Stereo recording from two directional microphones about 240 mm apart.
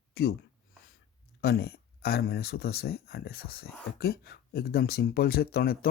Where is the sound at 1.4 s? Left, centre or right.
Left.